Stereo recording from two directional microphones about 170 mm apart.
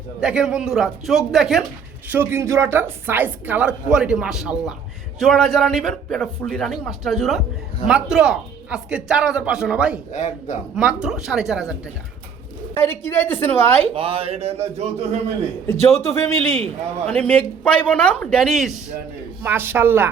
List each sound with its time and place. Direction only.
0.2 s a man's voice: 5° right (ahead or behind)
2.0 s a woman's voice: 15° right (ahead or behind)
10.1 s a man's voice: 45° left (ahead or behind)
10.8 s a man's voice: 5° right (ahead or behind)
12.7 s a woman's voice: 15° left (ahead or behind)
13.9 s a sound: 30° right (ahead or behind)
15.6 s speech: 15° left (ahead or behind)
19.4 s a woman's voice: 10° right (ahead or behind)